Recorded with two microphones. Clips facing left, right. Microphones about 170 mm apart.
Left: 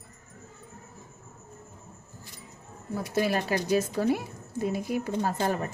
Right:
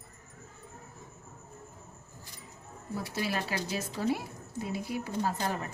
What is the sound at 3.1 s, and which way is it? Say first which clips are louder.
Speech: left 8 dB; 50° left (ahead or behind).